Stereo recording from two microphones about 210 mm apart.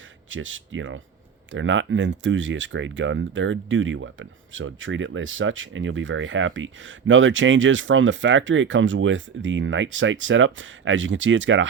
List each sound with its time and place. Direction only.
0.3 s speech: 65° right (ahead or behind)